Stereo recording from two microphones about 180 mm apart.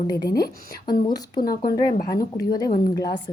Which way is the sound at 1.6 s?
50° left (ahead or behind).